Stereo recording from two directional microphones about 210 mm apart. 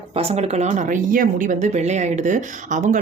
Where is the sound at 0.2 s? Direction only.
30° right (ahead or behind).